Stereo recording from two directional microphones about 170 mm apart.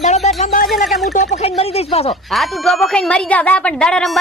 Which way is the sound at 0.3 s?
40° left (ahead or behind).